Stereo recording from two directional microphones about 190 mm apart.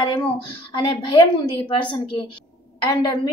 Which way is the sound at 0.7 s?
25° left (ahead or behind).